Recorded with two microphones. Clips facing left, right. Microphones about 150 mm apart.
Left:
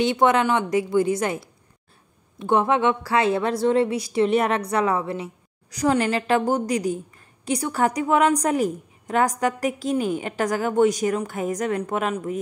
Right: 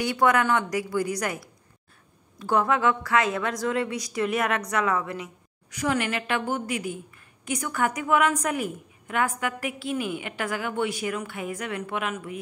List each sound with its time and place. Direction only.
0.0 s a woman's voice: 25° left (ahead or behind); by 12.4 s 40° left (ahead or behind)